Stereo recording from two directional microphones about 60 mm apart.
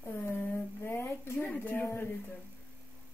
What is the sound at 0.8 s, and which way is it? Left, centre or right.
A woman's voice, left.